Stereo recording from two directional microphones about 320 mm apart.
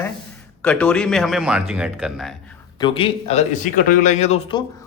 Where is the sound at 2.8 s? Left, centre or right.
Centre.